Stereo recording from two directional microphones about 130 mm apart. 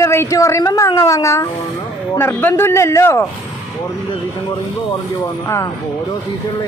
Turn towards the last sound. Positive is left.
turn(degrees=25)  # may be behind; listen again after turning